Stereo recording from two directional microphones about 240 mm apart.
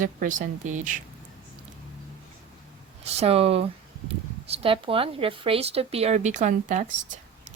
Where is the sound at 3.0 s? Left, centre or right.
Right.